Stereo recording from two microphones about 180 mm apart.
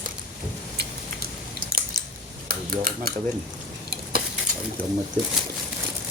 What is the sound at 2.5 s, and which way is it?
Dishes, 55° right (ahead or behind).